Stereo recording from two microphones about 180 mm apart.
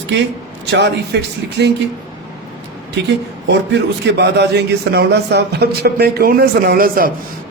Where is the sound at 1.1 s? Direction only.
70° right (ahead or behind).